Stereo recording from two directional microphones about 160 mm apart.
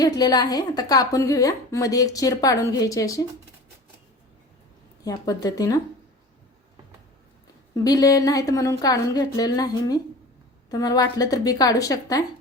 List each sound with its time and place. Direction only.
0.0 s a woman's voice: 25° left (ahead or behind)
5.0 s a woman's voice: 20° left (ahead or behind)
7.7 s a woman's voice: 20° left (ahead or behind)